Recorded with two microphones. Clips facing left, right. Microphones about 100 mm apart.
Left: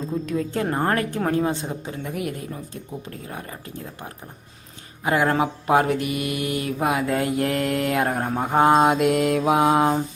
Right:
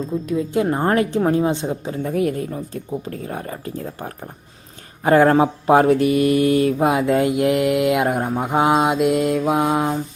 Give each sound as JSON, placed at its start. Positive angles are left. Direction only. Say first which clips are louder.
{"t": 0.1, "sound": "mantra", "louder": "right 2 dB", "side_deg": -5}
{"t": 0.5, "sound": "a woman's voice", "louder": "right 5 dB", "side_deg": -15}
{"t": 3.0, "sound": "mantra", "louder": "right 6 dB", "side_deg": -35}
{"t": 5.0, "sound": "mantra", "louder": "right 7 dB", "side_deg": -40}
{"t": 6.7, "sound": "speech", "louder": "right 5 dB", "side_deg": -25}
{"t": 8.3, "sound": "mantra", "louder": "left 3 dB", "side_deg": -10}